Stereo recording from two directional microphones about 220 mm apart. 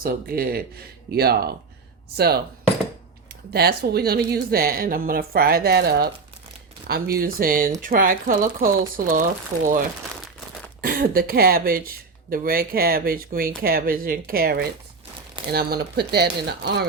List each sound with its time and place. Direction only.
0.0 s a woman's voice: 45° right (ahead or behind)
3.5 s a woman's voice: 45° right (ahead or behind)
10.8 s a woman's voice: 40° right (ahead or behind)